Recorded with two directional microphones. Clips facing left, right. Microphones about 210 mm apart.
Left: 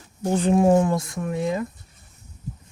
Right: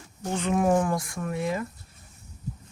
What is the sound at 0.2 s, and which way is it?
Speech, 30° left (ahead or behind).